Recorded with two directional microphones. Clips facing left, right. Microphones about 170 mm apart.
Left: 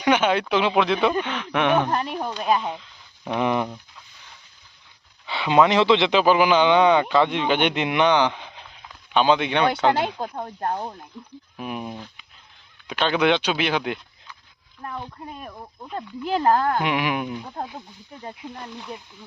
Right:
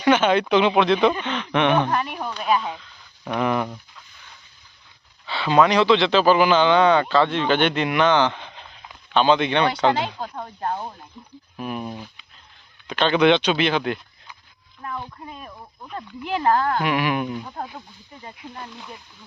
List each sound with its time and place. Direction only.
0.0 s speech: 10° left (ahead or behind)
1.9 s speech: 35° left (ahead or behind)
3.2 s speech: 20° left (ahead or behind)
5.2 s speech: 20° left (ahead or behind)
10.2 s speech: 45° left (ahead or behind)
11.5 s speech: 10° left (ahead or behind)
15.8 s speech: 30° left (ahead or behind)
16.8 s speech: 15° left (ahead or behind)
18.4 s speech: centre (ahead or behind)